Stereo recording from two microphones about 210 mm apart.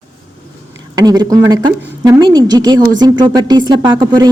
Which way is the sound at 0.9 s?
20° right (ahead or behind).